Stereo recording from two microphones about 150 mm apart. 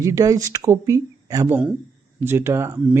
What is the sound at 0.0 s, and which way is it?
Speech, 20° right (ahead or behind).